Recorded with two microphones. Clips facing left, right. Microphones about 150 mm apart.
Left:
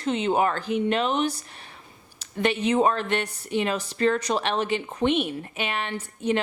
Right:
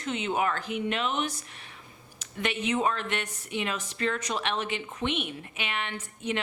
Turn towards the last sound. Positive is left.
turn(degrees=35)  # may be behind; listen again after turning